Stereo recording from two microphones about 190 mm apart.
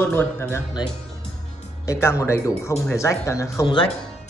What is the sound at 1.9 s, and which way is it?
Speech, 15° left (ahead or behind).